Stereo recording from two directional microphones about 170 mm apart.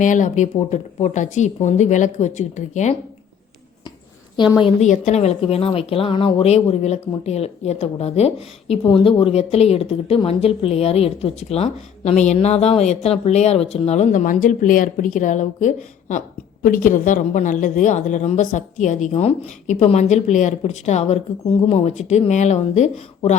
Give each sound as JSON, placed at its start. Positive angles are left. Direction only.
{"t": 0.0, "sound": "a woman's voice", "side_deg": 50}
{"t": 4.6, "sound": "a woman's voice", "side_deg": 45}